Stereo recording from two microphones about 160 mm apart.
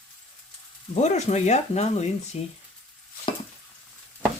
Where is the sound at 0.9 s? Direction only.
45° left (ahead or behind).